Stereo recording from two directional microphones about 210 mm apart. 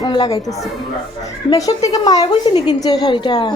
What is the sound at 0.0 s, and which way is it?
A woman's voice, 20° left (ahead or behind).